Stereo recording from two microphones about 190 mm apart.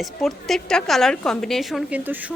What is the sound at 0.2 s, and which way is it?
A woman's voice, centre (ahead or behind).